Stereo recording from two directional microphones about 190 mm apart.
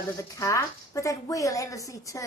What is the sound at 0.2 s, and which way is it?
A woman's voice, 15° left (ahead or behind).